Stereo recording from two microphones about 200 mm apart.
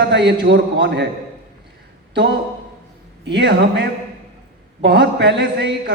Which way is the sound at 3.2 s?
60° right (ahead or behind).